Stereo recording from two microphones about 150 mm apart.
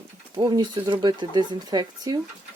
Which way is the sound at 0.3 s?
30° right (ahead or behind).